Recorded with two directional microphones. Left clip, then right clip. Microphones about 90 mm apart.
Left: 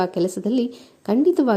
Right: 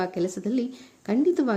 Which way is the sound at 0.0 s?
40° left (ahead or behind).